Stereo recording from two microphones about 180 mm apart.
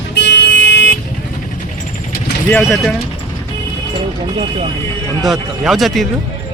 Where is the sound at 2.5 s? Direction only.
15° left (ahead or behind).